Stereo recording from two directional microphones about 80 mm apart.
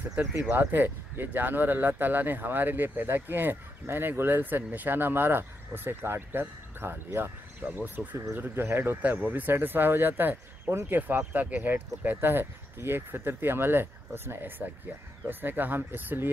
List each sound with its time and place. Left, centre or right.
0.2 s speech: right